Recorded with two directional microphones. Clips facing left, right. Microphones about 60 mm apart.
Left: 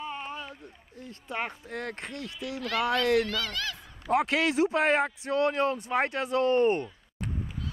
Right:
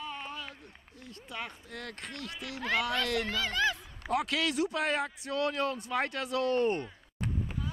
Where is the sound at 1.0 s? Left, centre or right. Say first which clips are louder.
Left 7 dB; left.